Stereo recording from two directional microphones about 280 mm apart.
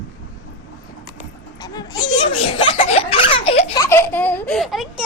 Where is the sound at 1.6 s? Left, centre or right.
Centre.